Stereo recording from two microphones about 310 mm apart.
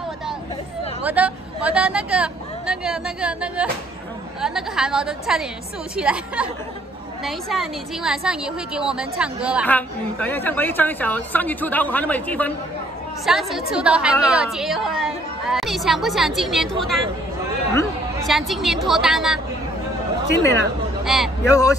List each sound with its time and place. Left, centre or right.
1.0 s a sound: centre
4.4 s a woman's voice: centre
20.2 s speech: right
21.0 s speech: centre
21.5 s speech: centre